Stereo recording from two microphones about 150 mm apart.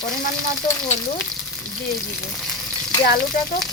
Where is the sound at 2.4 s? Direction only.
Centre (ahead or behind).